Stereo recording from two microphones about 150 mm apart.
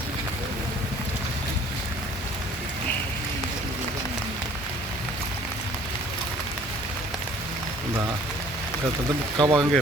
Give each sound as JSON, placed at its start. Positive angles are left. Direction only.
{"t": 9.4, "sound": "speech", "side_deg": -30}